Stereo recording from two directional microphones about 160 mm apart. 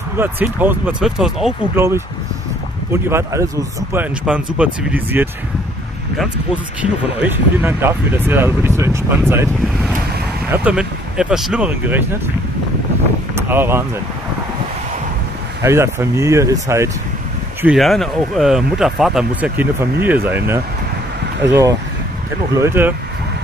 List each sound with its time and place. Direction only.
0.2 s speech: 10° right (ahead or behind)
1.8 s speech: 15° right (ahead or behind)
10.5 s speech: 5° right (ahead or behind)
13.5 s speech: 15° right (ahead or behind)
15.6 s speech: 15° right (ahead or behind)
17.7 s speech: centre (ahead or behind)
22.6 s speech: 15° right (ahead or behind)